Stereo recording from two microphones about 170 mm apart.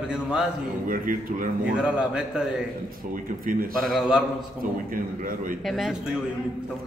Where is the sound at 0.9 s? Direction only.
55° right (ahead or behind).